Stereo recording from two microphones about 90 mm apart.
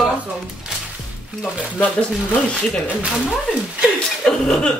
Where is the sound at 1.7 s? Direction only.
15° left (ahead or behind).